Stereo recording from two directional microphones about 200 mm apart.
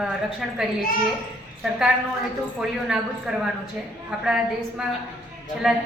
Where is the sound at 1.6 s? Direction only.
5° right (ahead or behind).